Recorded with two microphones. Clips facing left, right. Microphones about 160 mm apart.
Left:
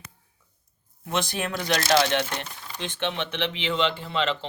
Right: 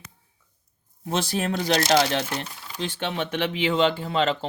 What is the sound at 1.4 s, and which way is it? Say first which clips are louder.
Speech: right 4 dB; 35° right (ahead or behind).